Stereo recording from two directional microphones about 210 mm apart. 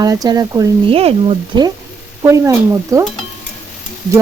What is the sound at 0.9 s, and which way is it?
Speech, 25° right (ahead or behind).